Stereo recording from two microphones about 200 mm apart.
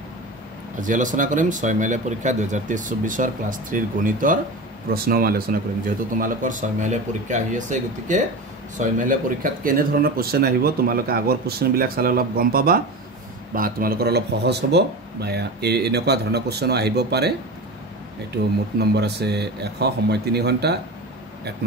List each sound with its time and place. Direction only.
0.7 s speech: 40° right (ahead or behind)
18.8 s speech: 55° right (ahead or behind)